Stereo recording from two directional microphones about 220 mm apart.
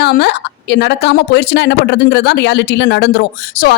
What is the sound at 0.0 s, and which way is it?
A woman's voice, 50° left (ahead or behind).